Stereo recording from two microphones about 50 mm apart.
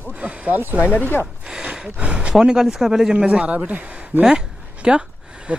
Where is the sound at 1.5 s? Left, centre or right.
Right.